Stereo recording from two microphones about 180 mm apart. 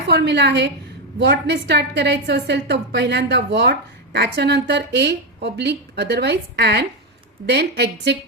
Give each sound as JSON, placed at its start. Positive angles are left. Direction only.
{"t": 0.1, "sound": "a woman's voice", "side_deg": -70}